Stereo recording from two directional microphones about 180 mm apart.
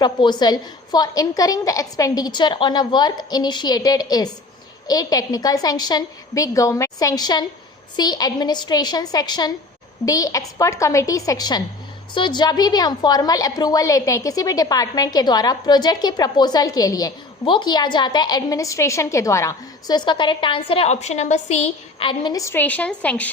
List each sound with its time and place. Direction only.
0.0 s a woman's voice: 25° left (ahead or behind); by 23.3 s 10° left (ahead or behind)